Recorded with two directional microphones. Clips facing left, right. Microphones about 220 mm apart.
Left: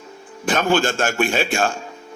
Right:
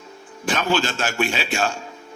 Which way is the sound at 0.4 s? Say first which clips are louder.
Left 4 dB; 50° left (ahead or behind).